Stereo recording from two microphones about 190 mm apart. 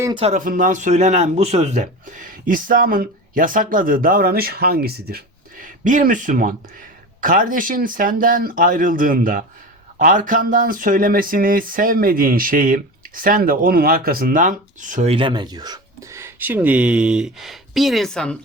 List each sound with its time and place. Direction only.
0.2 s speech: 40° right (ahead or behind)
15.1 s speech: 25° right (ahead or behind); by 18.3 s 5° left (ahead or behind)